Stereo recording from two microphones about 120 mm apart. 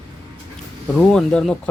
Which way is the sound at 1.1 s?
5° left (ahead or behind).